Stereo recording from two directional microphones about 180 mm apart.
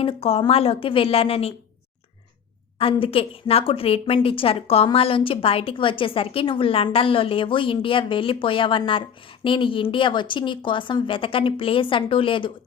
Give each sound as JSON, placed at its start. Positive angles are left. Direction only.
{"t": 0.0, "sound": "a woman's voice", "side_deg": 30}
{"t": 2.7, "sound": "a woman's voice", "side_deg": 30}